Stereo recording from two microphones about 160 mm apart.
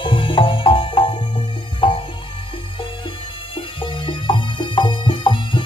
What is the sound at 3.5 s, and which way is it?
Music, 30° left (ahead or behind).